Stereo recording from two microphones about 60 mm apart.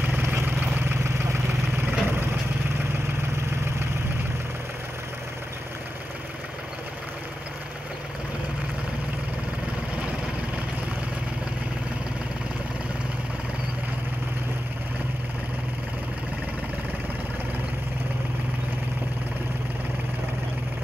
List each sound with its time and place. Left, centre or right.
0.0 s vehicle: right
1.0 s vehicle: right